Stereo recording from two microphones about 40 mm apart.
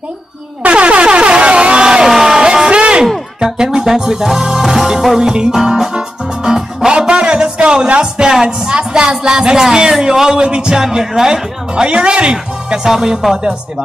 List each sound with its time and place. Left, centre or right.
0.6 s air horn: right
2.1 s a sound: centre
3.3 s music: centre